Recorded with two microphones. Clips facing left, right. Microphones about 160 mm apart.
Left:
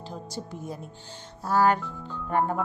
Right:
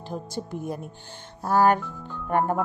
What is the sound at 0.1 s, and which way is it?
Speech, 55° right (ahead or behind).